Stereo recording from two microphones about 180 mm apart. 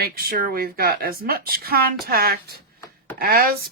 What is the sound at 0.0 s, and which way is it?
Speech, 55° right (ahead or behind).